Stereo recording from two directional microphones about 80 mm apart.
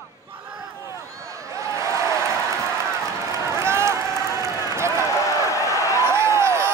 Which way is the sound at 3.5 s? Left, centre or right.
Right.